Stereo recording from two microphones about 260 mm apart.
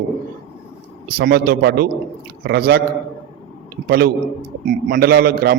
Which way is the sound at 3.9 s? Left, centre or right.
Right.